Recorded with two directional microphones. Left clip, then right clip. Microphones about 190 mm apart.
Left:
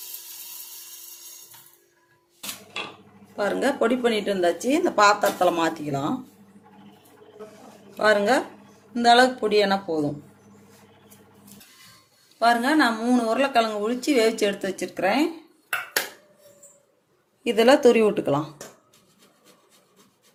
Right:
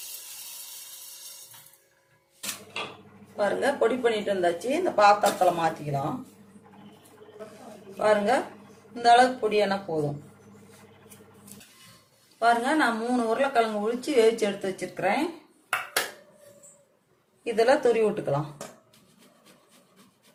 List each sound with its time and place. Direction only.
3.3 s a woman's voice: 45° left (ahead or behind)
7.9 s a woman's voice: 50° left (ahead or behind)
12.4 s a woman's voice: 50° left (ahead or behind)
17.4 s a woman's voice: 50° left (ahead or behind)